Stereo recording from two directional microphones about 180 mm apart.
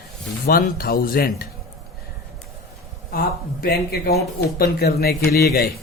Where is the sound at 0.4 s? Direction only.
55° left (ahead or behind).